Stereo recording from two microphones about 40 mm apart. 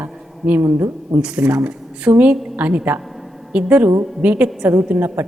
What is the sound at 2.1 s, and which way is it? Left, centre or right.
A woman's voice, right.